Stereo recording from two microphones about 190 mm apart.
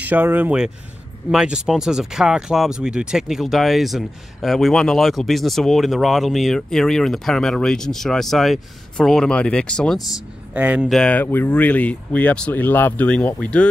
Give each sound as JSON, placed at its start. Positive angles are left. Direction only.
{"t": 0.0, "sound": "speech", "side_deg": -10}
{"t": 10.5, "sound": "speech", "side_deg": -5}